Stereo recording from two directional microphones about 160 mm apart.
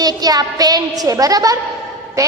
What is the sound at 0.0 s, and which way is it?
A woman's voice, 25° right (ahead or behind).